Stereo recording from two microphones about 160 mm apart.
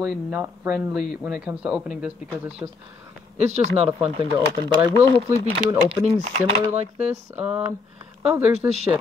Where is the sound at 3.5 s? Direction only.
40° right (ahead or behind).